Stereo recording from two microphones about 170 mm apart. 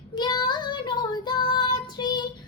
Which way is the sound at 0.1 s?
25° left (ahead or behind).